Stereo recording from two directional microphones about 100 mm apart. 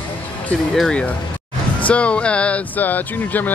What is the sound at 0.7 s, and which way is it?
Speech, 10° left (ahead or behind).